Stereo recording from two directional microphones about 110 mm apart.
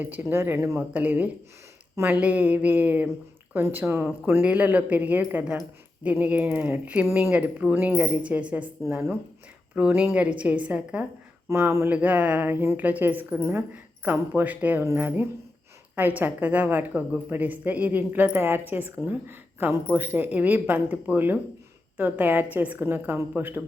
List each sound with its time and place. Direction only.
0.0 s a woman's voice: 15° right (ahead or behind)
8.9 s a woman's voice: 20° right (ahead or behind)
11.4 s a woman's voice: 20° right (ahead or behind)